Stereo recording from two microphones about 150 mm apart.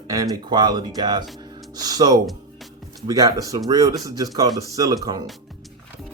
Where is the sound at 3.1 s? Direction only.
20° right (ahead or behind).